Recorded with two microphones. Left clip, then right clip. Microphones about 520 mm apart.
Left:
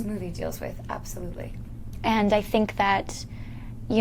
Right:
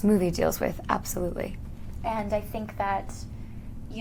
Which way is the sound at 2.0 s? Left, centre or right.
Left.